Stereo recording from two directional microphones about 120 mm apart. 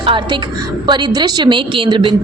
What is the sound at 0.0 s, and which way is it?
Speech, 50° right (ahead or behind).